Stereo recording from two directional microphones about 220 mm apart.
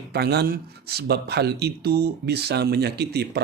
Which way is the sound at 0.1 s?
45° right (ahead or behind).